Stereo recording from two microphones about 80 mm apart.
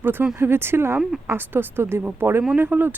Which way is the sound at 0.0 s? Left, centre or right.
Right.